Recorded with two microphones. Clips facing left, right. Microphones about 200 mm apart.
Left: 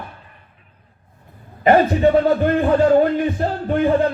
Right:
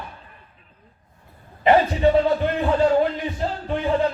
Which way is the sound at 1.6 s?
50° left (ahead or behind).